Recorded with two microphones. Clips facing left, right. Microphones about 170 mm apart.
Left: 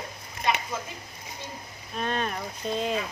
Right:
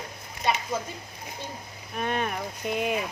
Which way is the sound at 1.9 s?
10° right (ahead or behind).